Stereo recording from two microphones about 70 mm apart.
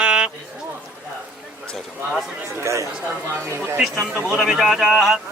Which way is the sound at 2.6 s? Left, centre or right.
Right.